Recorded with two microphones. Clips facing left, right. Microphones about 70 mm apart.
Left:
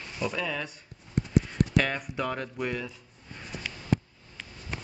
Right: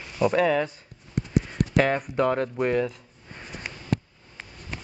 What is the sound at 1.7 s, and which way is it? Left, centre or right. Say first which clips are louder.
Speech: right 9 dB; right.